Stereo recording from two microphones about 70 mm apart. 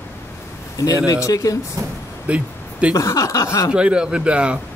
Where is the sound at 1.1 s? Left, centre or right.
Left.